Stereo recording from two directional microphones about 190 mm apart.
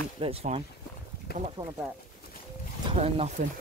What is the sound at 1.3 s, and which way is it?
Speech, 55° left (ahead or behind).